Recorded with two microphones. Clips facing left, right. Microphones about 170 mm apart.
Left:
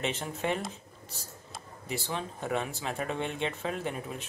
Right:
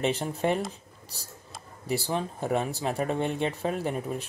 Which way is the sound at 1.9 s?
35° right (ahead or behind).